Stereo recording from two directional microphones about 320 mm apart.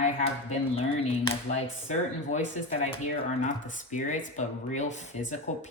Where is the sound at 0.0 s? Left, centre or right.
Left.